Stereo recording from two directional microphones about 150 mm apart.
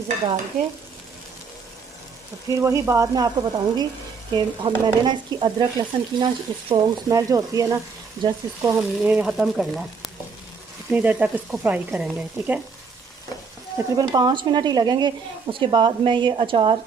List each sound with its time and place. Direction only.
2.6 s speech: 20° right (ahead or behind)
8.7 s speech: 10° right (ahead or behind)
13.9 s speech: 25° right (ahead or behind)